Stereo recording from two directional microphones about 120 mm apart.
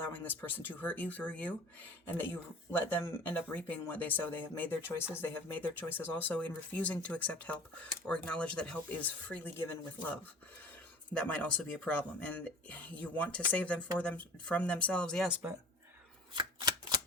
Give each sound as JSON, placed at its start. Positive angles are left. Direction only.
{"t": 0.0, "sound": "speech", "side_deg": 15}
{"t": 11.2, "sound": "speech", "side_deg": 10}
{"t": 16.3, "sound": "shuffling cards", "side_deg": -40}